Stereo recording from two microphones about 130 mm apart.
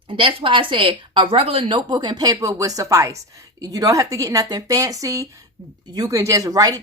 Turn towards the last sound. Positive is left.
turn(degrees=-30)  # may be behind; listen again after turning